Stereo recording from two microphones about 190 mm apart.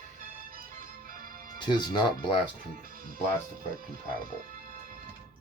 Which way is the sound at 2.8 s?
50° right (ahead or behind).